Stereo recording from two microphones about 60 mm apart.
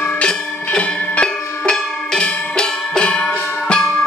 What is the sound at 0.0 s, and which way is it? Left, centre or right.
Music, centre.